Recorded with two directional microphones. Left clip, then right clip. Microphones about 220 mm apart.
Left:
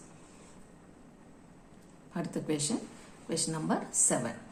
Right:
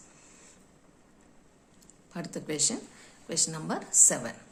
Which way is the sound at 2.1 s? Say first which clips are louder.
Left 1 dB; 25° right (ahead or behind).